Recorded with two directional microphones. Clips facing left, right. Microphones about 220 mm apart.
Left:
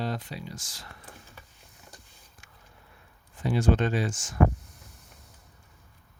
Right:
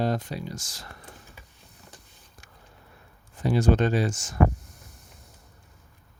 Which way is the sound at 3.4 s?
40° right (ahead or behind).